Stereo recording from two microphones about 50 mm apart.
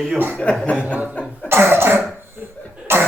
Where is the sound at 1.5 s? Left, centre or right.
Right.